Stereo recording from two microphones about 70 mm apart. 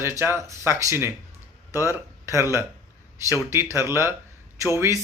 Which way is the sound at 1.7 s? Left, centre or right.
Left.